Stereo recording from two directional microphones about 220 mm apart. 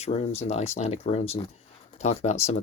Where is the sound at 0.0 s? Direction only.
30° left (ahead or behind).